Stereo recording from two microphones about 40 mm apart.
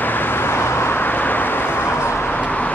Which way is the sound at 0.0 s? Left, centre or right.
Left.